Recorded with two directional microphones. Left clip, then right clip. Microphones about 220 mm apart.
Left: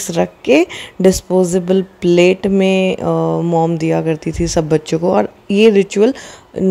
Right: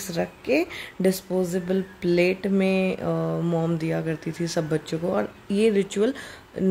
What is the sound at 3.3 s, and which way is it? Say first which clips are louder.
Mantra: left 12 dB; 20° left (ahead or behind).